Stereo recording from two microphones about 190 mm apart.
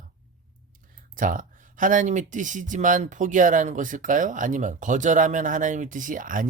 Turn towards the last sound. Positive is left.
turn(degrees=-45)  # may be behind; listen again after turning